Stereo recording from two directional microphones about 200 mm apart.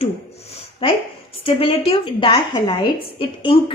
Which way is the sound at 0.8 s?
30° left (ahead or behind).